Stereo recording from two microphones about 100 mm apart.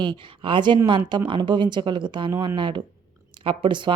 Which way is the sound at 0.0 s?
50° right (ahead or behind).